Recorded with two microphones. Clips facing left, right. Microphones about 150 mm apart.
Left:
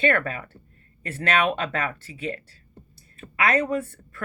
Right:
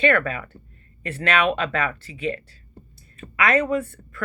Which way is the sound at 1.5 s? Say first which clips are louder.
Right 3 dB; 45° left (ahead or behind).